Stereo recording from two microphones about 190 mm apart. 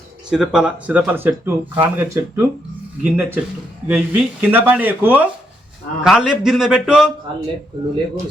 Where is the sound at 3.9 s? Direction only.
10° right (ahead or behind).